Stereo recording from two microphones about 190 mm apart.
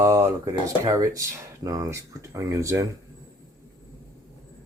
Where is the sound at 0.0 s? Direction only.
15° right (ahead or behind).